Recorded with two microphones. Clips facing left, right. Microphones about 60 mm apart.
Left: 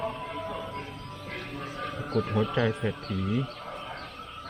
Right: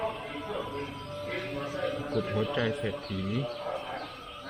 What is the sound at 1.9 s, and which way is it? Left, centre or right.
Speech, left.